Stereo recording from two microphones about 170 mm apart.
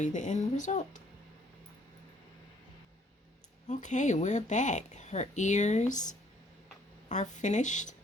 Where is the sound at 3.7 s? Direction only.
45° left (ahead or behind).